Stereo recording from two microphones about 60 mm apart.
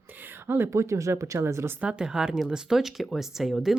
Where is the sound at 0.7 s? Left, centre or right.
Right.